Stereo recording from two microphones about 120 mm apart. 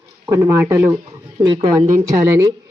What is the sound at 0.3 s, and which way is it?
Speech, 20° right (ahead or behind).